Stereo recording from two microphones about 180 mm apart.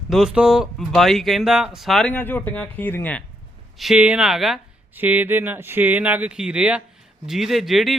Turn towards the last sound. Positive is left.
turn(degrees=0)  # may be behind; listen again after turning